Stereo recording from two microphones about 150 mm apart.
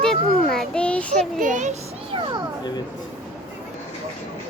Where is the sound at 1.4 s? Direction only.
55° right (ahead or behind).